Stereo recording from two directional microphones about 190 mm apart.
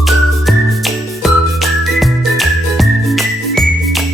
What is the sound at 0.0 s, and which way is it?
Music, centre (ahead or behind).